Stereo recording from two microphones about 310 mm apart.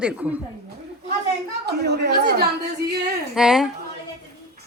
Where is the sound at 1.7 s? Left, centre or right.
Right.